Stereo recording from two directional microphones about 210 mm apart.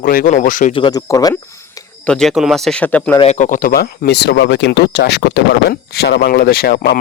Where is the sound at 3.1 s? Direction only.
30° left (ahead or behind).